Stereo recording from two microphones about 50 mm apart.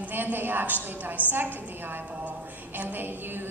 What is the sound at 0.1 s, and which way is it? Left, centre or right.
A woman's voice, right.